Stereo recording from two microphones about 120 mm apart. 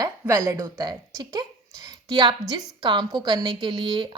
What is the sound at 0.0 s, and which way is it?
A woman's voice, 30° right (ahead or behind).